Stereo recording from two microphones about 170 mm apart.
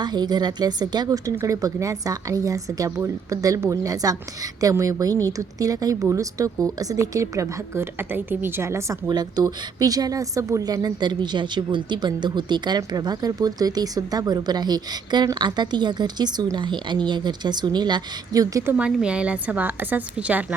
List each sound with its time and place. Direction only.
0.0 s a woman's voice: 25° right (ahead or behind); by 20.4 s 10° right (ahead or behind)